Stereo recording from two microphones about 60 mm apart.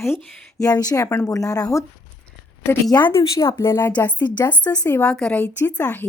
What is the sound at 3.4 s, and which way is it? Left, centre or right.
Speech, left.